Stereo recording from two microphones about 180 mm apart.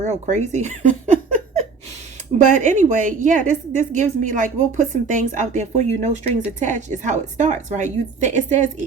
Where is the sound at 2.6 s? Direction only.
45° right (ahead or behind).